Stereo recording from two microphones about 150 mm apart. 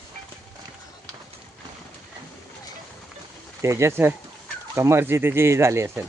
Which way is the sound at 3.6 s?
20° right (ahead or behind).